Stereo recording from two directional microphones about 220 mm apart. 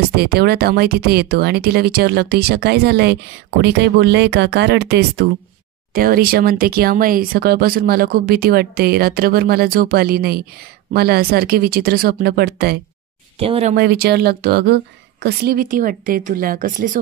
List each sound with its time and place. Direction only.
0.1 s speech: 45° right (ahead or behind)
13.4 s speech: 25° right (ahead or behind)
13.7 s speech: 45° right (ahead or behind)